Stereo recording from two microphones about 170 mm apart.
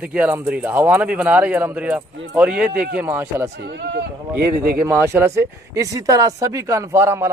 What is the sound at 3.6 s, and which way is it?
Speech, 80° right.